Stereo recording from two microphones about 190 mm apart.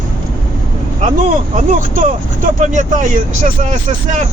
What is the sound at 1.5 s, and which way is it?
Speech, 45° right (ahead or behind).